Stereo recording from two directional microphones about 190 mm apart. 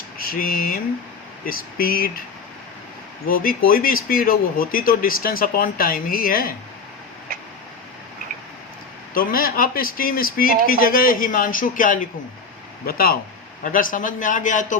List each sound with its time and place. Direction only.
0.2 s a sound: 50° left (ahead or behind)
1.5 s speech: 50° left (ahead or behind)
3.2 s speech: 50° left (ahead or behind)
9.1 s speech: 50° left (ahead or behind)